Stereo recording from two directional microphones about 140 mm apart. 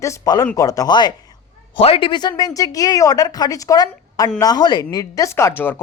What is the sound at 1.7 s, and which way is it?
Speech, 40° left (ahead or behind).